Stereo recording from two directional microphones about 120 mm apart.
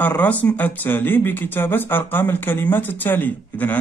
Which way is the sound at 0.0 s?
15° left (ahead or behind).